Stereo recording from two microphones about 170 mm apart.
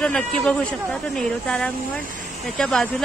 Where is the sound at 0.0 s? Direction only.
5° left (ahead or behind).